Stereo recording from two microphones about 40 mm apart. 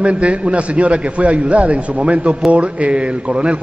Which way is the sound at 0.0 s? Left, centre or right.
Right.